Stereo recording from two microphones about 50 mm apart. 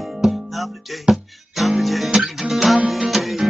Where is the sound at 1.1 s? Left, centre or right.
Centre.